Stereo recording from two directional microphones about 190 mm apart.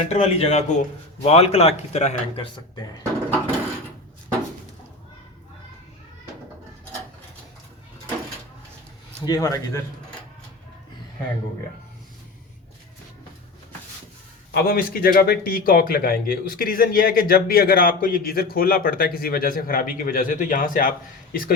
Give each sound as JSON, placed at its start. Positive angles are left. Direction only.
{"t": 0.1, "sound": "a man's voice", "side_deg": 35}
{"t": 3.0, "sound": "a sound", "side_deg": -10}
{"t": 9.2, "sound": "speech", "side_deg": 20}
{"t": 14.5, "sound": "speech", "side_deg": 50}